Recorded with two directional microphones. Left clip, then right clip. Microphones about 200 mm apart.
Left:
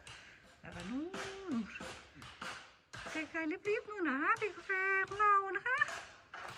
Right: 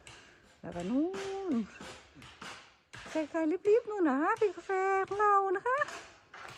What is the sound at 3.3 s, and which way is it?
Speech, 15° right (ahead or behind).